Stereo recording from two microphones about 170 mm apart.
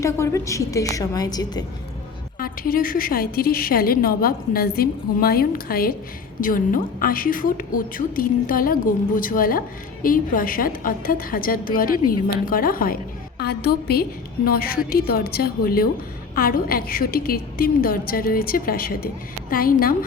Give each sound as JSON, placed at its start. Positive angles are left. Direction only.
{"t": 0.0, "sound": "a woman's voice", "side_deg": 15}
{"t": 2.4, "sound": "a woman's voice", "side_deg": 60}
{"t": 13.4, "sound": "a woman's voice", "side_deg": 70}